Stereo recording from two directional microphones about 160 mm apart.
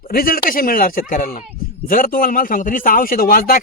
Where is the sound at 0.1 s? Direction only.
70° left (ahead or behind).